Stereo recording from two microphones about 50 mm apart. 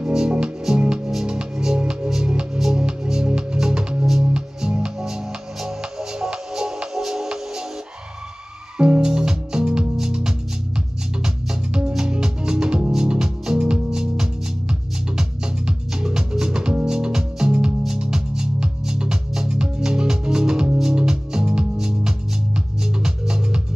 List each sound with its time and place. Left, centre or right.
0.0 s music: centre
8.7 s music: centre